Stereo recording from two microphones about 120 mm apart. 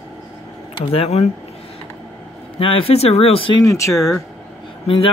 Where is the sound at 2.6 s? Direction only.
50° left (ahead or behind).